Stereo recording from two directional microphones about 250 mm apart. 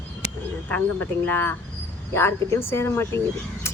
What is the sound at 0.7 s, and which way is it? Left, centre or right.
Speech, centre.